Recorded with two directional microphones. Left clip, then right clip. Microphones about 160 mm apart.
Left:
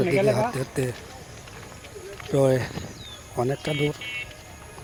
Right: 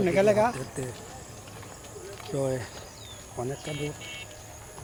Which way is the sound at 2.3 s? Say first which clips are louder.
Left 9 dB; 60° left (ahead or behind).